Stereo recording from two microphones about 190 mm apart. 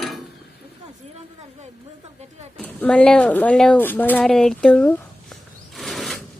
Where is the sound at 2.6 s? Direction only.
5° left (ahead or behind).